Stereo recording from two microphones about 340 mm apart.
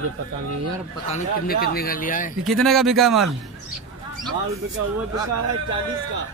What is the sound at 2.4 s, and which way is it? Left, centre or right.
Speech, centre.